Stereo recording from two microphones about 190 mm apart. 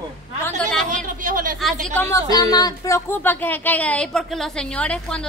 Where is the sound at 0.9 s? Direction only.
45° right (ahead or behind).